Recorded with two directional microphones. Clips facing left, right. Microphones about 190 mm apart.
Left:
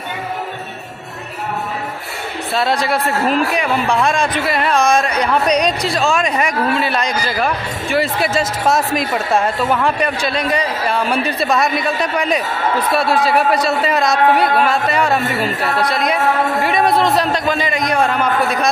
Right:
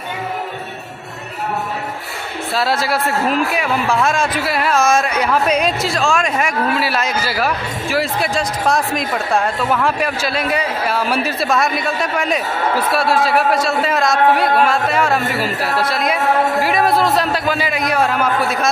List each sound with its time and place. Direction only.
2.5 s a man's voice: centre (ahead or behind)